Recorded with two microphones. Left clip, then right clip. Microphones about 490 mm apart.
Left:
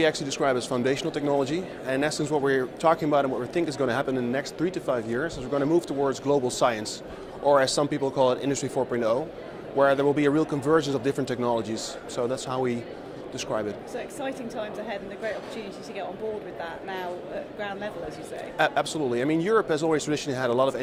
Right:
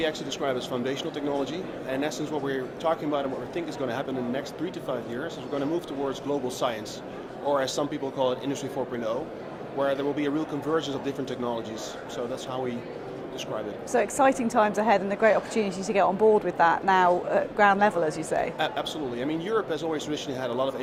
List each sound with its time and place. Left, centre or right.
0.0 s a man's voice: left
13.9 s a woman's voice: right
18.5 s a man's voice: left